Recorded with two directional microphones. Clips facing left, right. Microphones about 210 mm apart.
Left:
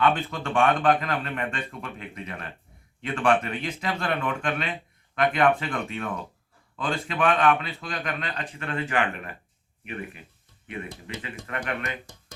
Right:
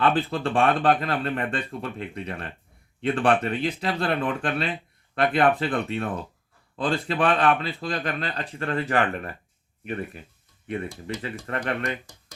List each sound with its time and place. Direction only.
0.0 s speech: 35° right (ahead or behind)